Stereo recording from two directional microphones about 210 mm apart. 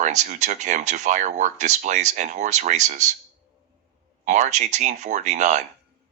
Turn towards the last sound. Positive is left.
turn(degrees=-35)  # may be behind; listen again after turning